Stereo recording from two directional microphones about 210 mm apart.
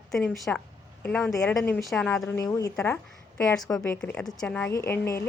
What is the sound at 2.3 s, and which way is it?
Speech, 15° left (ahead or behind).